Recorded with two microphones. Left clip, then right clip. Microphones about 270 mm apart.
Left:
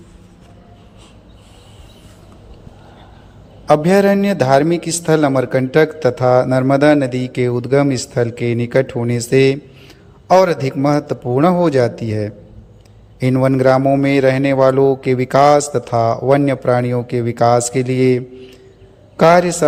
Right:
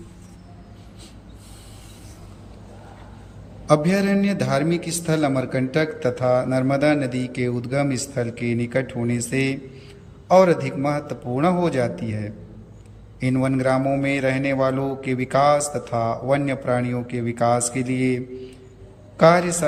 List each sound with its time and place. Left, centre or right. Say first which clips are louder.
3.7 s a man's voice: left 8 dB; centre